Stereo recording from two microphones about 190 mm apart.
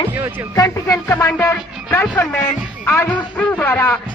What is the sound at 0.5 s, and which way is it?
Speech, 15° left (ahead or behind).